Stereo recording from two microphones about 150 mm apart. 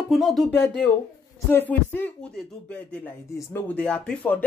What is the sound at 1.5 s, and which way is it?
A man's voice, 15° left (ahead or behind).